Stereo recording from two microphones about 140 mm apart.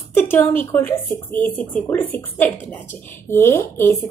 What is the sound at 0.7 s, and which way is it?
Speech, 15° left (ahead or behind).